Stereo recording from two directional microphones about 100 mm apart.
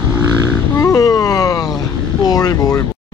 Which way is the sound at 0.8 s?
35° left (ahead or behind).